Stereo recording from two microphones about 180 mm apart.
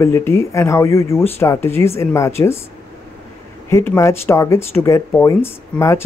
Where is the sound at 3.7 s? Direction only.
15° left (ahead or behind).